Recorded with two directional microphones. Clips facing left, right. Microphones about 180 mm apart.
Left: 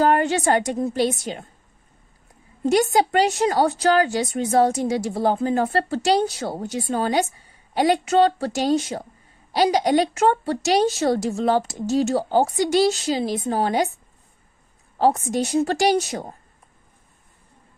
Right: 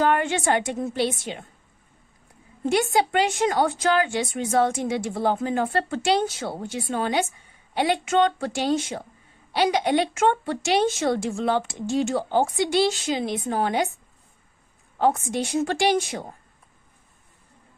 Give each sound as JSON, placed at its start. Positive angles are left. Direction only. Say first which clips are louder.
{"t": 0.0, "sound": "a woman's voice", "louder": "left 3 dB", "side_deg": 40}
{"t": 2.6, "sound": "a woman's voice", "louder": "left 3 dB", "side_deg": 40}
{"t": 14.9, "sound": "a woman's voice", "louder": "left 3 dB", "side_deg": 35}